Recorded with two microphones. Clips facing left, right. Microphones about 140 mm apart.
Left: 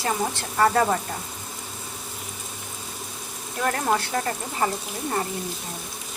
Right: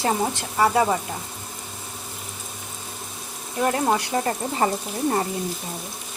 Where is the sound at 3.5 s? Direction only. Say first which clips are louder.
Right 3 dB; 15° right (ahead or behind).